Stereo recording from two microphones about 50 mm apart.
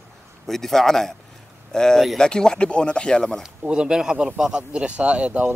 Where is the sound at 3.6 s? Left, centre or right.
Centre.